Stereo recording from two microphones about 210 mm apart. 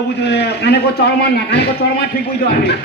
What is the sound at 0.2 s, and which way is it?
A man's voice, 55° left (ahead or behind).